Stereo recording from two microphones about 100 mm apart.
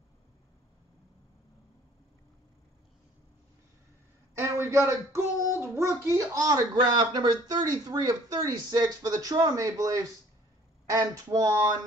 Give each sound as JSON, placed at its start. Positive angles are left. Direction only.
{"t": 4.4, "sound": "child singing", "side_deg": -25}
{"t": 6.0, "sound": "a man's voice", "side_deg": -35}